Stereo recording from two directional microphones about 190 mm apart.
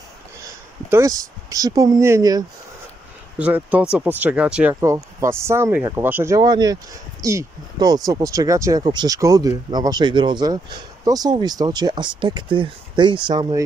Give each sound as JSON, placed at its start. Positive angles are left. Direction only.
{"t": 0.8, "sound": "speech", "side_deg": -15}